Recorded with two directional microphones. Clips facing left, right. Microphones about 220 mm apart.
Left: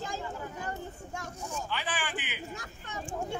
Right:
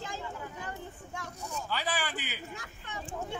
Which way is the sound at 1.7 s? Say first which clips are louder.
Right 4 dB; 40° right (ahead or behind).